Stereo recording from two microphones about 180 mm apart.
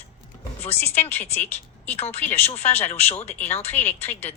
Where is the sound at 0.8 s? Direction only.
10° left (ahead or behind).